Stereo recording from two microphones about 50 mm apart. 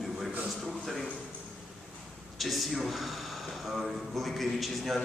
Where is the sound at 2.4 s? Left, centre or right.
Centre.